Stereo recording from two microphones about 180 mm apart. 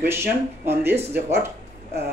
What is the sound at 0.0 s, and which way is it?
Speech, 10° right (ahead or behind).